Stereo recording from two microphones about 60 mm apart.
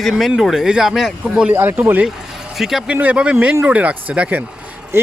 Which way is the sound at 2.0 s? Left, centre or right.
Centre.